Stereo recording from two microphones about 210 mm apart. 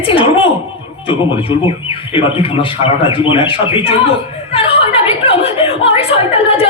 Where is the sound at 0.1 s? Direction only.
25° left (ahead or behind).